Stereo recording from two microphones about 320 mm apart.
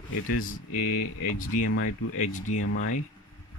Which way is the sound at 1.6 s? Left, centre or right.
Left.